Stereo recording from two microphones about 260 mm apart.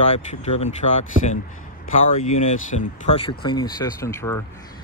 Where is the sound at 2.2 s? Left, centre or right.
Left; by 4.4 s centre.